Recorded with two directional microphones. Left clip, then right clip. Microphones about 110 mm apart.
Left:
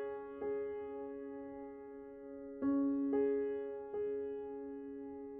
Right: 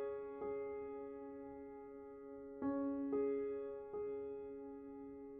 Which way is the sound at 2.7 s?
20° left (ahead or behind).